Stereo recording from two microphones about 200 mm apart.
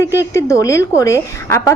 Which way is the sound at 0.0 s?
15° left (ahead or behind).